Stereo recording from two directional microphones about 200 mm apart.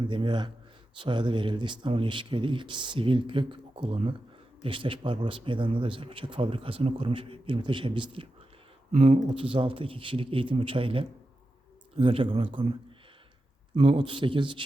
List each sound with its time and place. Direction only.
0.1 s a man's voice: 25° right (ahead or behind)
13.7 s a man's voice: 25° right (ahead or behind)